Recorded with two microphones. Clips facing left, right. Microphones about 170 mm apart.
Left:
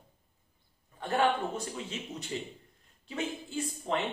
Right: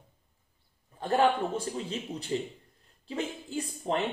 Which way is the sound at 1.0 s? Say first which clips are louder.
Right 3 dB; 35° right (ahead or behind).